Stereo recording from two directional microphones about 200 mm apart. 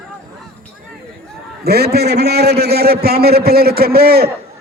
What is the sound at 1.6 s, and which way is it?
A man's voice, 50° right (ahead or behind).